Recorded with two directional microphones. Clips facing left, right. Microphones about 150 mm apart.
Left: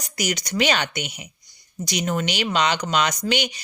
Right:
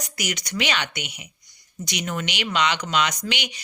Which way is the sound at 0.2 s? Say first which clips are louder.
Left 5 dB; 35° left (ahead or behind).